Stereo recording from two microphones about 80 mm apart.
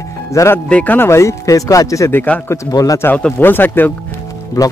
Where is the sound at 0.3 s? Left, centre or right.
Left.